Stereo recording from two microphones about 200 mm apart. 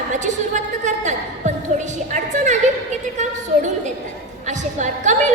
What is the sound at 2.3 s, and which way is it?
Speech, 35° right (ahead or behind).